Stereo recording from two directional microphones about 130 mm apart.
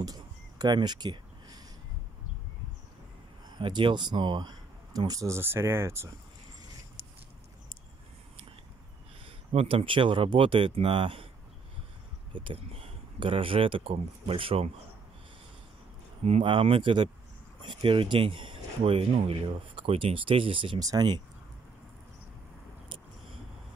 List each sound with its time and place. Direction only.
0.0 s a sound: 30° right (ahead or behind)
3.5 s speech: 35° right (ahead or behind); by 6.1 s 20° right (ahead or behind)
9.5 s speech: 50° right (ahead or behind)
12.3 s speech: 40° right (ahead or behind)
16.3 s speech: 45° right (ahead or behind)
20.8 s speech: 30° right (ahead or behind)